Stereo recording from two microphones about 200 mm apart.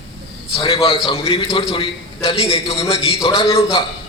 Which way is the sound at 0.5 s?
25° left (ahead or behind).